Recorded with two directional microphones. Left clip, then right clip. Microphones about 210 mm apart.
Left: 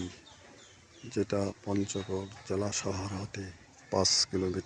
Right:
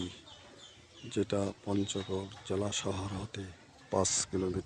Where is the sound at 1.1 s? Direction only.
Centre (ahead or behind).